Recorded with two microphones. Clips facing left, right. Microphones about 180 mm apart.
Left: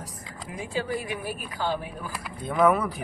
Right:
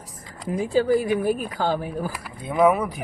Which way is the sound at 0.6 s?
40° right (ahead or behind).